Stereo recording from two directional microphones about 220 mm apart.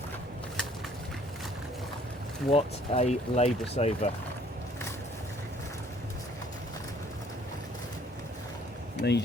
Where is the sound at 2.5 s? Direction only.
25° left (ahead or behind).